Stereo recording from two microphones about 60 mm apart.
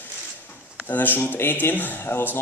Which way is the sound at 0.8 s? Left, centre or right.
Left.